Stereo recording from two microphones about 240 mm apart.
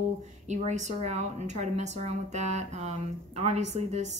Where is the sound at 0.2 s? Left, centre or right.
Right.